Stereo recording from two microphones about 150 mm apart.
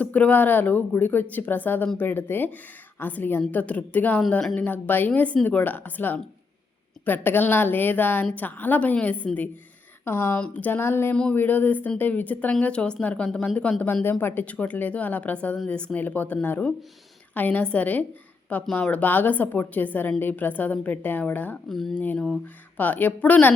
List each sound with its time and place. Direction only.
0.0 s speech: 10° left (ahead or behind)